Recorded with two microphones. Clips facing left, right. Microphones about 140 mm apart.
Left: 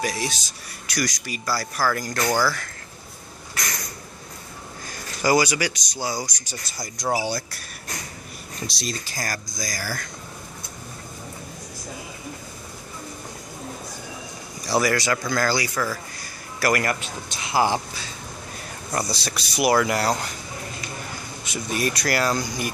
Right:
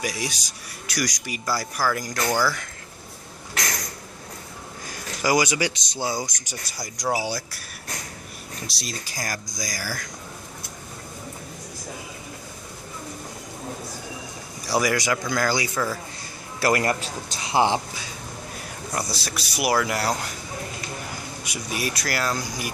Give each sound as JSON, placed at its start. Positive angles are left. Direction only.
{"t": 0.0, "sound": "speech", "side_deg": -15}
{"t": 2.2, "sound": "speech", "side_deg": 10}
{"t": 5.2, "sound": "speech", "side_deg": -15}
{"t": 6.8, "sound": "speech", "side_deg": -10}
{"t": 8.6, "sound": "speech", "side_deg": -5}
{"t": 14.7, "sound": "speech", "side_deg": -15}
{"t": 18.9, "sound": "speech", "side_deg": 0}
{"t": 21.5, "sound": "speech", "side_deg": -10}